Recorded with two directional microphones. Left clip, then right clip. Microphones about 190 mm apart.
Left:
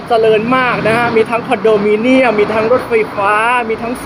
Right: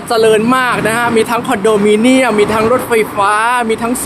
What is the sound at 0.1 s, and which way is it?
Speech, 30° right (ahead or behind).